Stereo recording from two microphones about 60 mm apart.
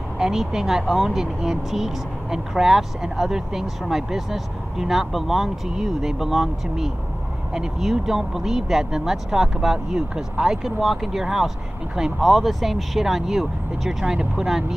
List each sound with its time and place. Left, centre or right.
0.2 s speech: centre